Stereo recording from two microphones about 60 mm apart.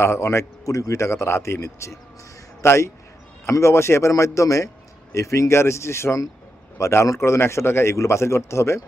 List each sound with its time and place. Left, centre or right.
0.0 s a man's voice: left
4.1 s a man's voice: left